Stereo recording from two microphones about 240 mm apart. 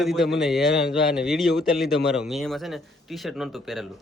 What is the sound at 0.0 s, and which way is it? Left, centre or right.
A man's voice, centre.